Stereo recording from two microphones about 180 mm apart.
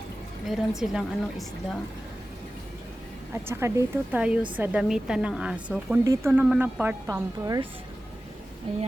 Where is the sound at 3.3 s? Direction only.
15° right (ahead or behind).